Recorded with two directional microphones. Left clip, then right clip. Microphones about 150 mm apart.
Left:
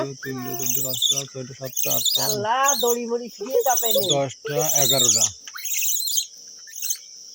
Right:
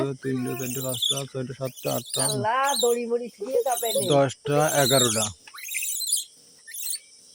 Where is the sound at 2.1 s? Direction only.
5° left (ahead or behind).